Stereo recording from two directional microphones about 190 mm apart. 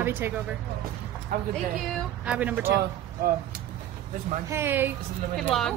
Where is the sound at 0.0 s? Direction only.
10° right (ahead or behind).